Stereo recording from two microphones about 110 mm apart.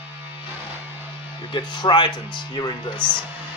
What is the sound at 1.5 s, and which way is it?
Speech, 45° left (ahead or behind).